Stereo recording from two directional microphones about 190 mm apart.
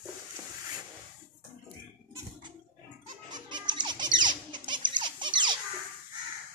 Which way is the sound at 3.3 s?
25° right (ahead or behind).